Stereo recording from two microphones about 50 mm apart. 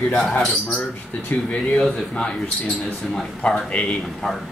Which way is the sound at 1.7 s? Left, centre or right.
Centre.